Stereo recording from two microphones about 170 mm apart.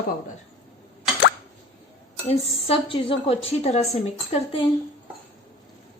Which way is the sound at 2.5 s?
35° left (ahead or behind).